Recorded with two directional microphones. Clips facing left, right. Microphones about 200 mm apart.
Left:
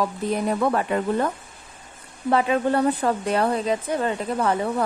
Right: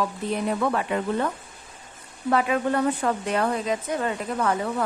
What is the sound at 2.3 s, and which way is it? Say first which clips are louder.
A woman's voice: left 2 dB; 30° left (ahead or behind).